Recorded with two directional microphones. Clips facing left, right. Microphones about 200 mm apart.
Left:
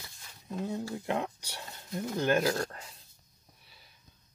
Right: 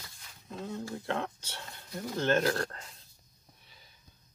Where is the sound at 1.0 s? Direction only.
15° left (ahead or behind).